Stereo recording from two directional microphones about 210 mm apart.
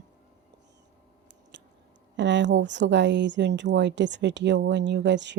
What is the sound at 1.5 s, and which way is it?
Chewing, 55° right (ahead or behind).